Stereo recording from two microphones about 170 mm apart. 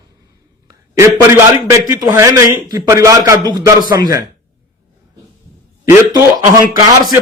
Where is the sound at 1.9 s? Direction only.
20° right (ahead or behind).